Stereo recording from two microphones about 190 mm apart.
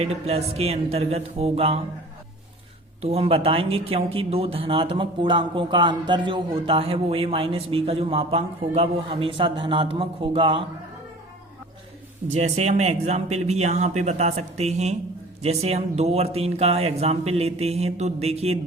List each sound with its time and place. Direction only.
0.0 s speech: 35° right (ahead or behind)
3.0 s speech: 30° right (ahead or behind)
12.3 s speech: 35° right (ahead or behind)